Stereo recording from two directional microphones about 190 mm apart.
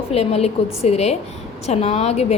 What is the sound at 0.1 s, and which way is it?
A woman's voice, 35° left (ahead or behind).